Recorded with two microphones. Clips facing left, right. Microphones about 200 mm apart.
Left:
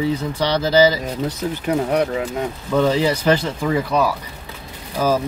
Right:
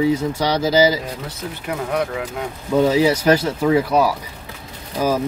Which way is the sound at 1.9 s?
20° left (ahead or behind).